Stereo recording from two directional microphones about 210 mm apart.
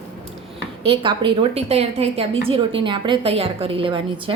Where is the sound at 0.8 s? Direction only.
25° right (ahead or behind).